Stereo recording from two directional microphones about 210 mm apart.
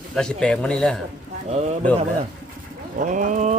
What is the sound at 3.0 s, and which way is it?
Speech, 35° right (ahead or behind).